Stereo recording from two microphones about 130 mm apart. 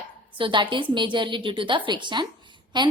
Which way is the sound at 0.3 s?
40° right (ahead or behind).